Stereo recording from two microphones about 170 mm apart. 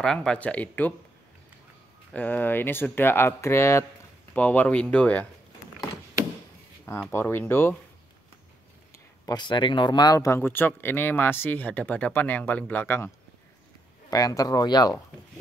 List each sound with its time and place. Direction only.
0.0 s speech: 5° left (ahead or behind)
2.1 s speech: 10° left (ahead or behind)
6.9 s speech: 15° left (ahead or behind)
8.9 s speech: 20° left (ahead or behind)
14.1 s speech: 20° left (ahead or behind)